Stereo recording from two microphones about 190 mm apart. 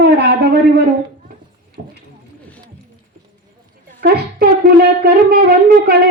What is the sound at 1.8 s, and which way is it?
Clip-clop, 50° right (ahead or behind).